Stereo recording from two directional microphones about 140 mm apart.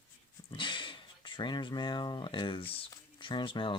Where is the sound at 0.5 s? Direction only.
35° left (ahead or behind).